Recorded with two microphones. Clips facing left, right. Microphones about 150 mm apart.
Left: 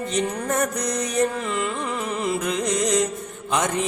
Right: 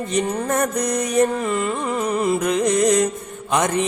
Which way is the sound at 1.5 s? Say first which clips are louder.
Right 4 dB; 40° right (ahead or behind).